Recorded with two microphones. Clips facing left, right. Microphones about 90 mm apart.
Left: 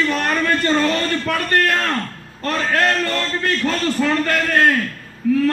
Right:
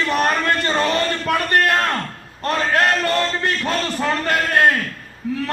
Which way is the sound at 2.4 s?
20° right (ahead or behind).